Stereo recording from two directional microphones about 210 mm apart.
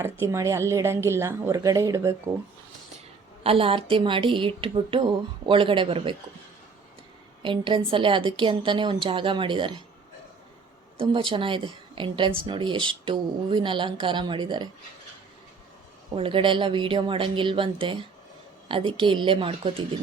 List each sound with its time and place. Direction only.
0.0 s a woman's voice: 10° right (ahead or behind)
3.4 s speech: 25° right (ahead or behind)
7.4 s speech: 25° right (ahead or behind)
10.9 s speech: 25° right (ahead or behind)
16.1 s speech: 25° right (ahead or behind)